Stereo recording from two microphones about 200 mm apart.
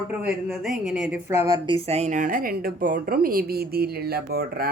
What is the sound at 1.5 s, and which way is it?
A woman's voice, 25° right (ahead or behind).